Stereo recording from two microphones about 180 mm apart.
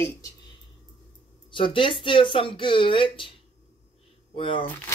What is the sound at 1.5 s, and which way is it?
Speech, 30° left (ahead or behind).